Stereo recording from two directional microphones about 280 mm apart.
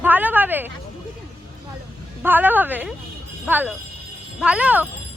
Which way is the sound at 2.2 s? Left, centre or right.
Centre.